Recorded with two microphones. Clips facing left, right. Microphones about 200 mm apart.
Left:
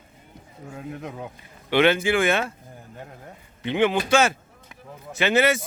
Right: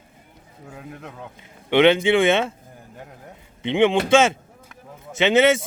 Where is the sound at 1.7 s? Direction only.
20° right (ahead or behind).